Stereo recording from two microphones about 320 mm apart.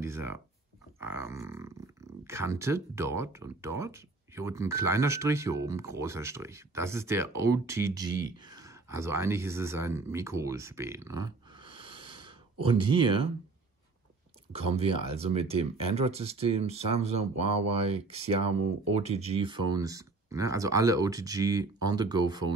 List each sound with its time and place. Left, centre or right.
0.0 s a sound: centre
0.9 s speech: centre
14.5 s speech: centre